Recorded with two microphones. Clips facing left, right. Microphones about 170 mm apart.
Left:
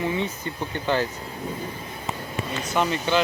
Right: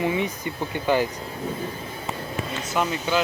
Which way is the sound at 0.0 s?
15° right (ahead or behind).